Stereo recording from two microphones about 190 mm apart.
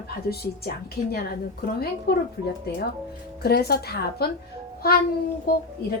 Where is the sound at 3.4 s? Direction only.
55° left (ahead or behind).